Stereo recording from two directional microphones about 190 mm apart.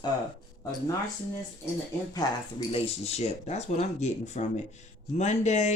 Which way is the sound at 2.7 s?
35° left (ahead or behind).